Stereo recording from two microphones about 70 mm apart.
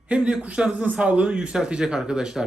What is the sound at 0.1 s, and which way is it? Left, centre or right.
A man's voice, centre.